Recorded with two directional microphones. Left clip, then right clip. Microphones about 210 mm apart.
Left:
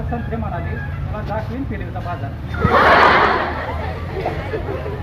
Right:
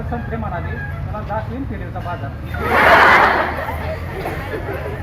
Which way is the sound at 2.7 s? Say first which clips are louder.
Right 1 dB; 40° right (ahead or behind).